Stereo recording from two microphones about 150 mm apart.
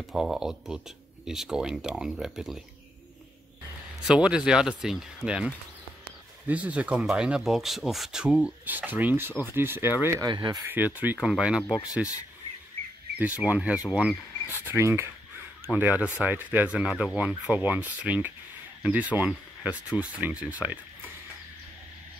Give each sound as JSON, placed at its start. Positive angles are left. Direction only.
{"t": 0.0, "sound": "speech", "side_deg": 0}
{"t": 4.1, "sound": "speech", "side_deg": -5}
{"t": 10.2, "sound": "speech", "side_deg": -30}
{"t": 10.7, "sound": "speech", "side_deg": -10}
{"t": 13.2, "sound": "speech", "side_deg": -10}